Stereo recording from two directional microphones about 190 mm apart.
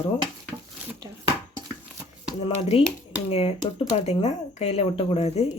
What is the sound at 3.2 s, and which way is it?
Speech, 30° left (ahead or behind).